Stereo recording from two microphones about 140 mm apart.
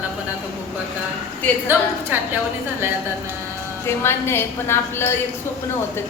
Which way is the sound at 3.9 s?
15° left (ahead or behind).